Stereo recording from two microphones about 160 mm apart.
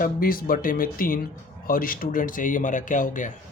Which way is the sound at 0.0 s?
60° left (ahead or behind).